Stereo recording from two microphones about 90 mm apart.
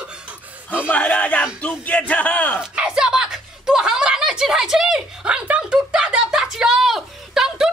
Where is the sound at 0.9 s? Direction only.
15° left (ahead or behind).